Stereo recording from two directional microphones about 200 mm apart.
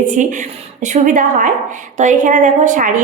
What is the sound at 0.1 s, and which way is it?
A woman's voice, 40° right (ahead or behind).